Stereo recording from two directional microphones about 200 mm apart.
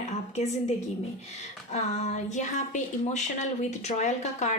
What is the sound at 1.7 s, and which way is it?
A woman's voice, 35° left (ahead or behind).